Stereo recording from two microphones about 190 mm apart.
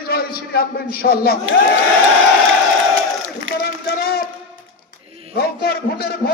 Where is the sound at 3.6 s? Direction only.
55° left (ahead or behind).